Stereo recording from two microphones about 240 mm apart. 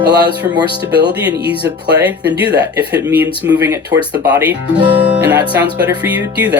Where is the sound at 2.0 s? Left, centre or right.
Centre.